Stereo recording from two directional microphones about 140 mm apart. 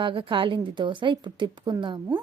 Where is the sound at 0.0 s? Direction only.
40° right (ahead or behind).